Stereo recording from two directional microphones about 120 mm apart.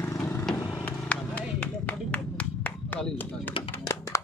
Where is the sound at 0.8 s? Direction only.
10° left (ahead or behind).